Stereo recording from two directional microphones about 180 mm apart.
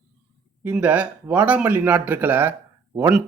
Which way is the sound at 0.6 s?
10° right (ahead or behind).